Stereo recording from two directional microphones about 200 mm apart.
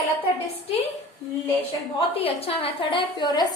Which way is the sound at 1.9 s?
30° left (ahead or behind).